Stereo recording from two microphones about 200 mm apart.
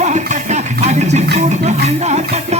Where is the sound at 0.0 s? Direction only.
35° right (ahead or behind).